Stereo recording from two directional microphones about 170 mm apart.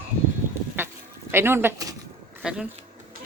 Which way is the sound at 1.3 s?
15° right (ahead or behind).